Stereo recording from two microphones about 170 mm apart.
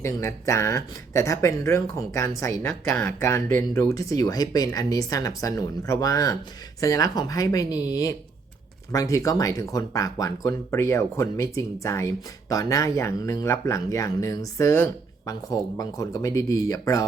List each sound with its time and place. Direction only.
0.0 s speech: 15° left (ahead or behind)